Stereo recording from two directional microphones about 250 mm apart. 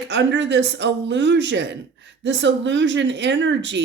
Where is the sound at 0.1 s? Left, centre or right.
Right.